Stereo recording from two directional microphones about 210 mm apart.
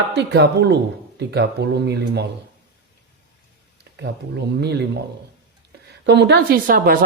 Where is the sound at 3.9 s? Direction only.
50° right (ahead or behind).